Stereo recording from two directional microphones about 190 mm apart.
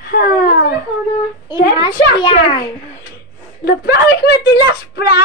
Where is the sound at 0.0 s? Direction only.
50° left (ahead or behind).